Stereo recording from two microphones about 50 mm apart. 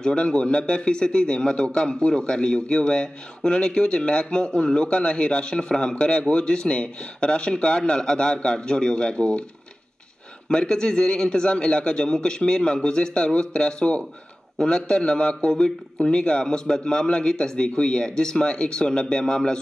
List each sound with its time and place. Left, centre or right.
0.0 s a man's voice: centre
10.5 s a man's voice: centre